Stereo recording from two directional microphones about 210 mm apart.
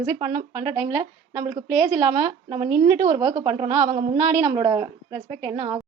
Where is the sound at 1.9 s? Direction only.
30° right (ahead or behind).